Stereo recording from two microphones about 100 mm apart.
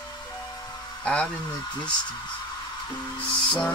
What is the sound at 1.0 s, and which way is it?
Speech, 10° left (ahead or behind).